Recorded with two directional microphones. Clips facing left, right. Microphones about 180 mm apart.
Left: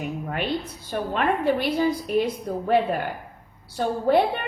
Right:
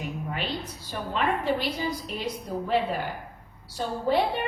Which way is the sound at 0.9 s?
55° left (ahead or behind).